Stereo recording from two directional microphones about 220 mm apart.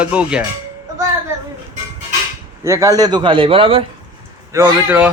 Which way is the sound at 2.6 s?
15° right (ahead or behind).